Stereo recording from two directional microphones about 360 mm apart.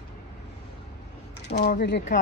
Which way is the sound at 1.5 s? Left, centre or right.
Left.